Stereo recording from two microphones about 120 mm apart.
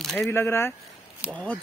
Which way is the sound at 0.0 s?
Centre (ahead or behind).